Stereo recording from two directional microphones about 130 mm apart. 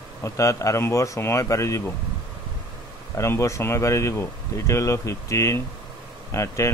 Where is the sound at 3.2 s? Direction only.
25° left (ahead or behind).